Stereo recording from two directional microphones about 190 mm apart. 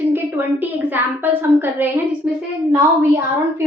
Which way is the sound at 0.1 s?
10° right (ahead or behind).